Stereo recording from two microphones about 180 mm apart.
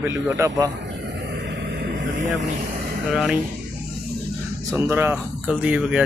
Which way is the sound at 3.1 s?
Centre (ahead or behind).